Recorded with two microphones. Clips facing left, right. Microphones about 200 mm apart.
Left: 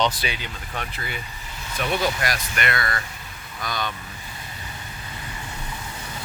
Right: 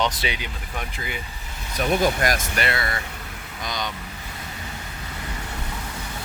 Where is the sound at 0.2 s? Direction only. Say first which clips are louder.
Right 1 dB; 15° right (ahead or behind).